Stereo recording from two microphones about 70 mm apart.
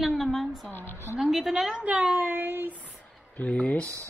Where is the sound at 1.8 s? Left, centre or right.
Right.